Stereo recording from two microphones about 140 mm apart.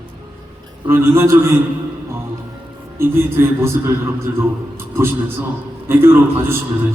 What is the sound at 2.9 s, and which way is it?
A man's voice, 15° right (ahead or behind).